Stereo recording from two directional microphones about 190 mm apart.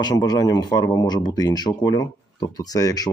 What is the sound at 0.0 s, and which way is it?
Speech, 20° left (ahead or behind).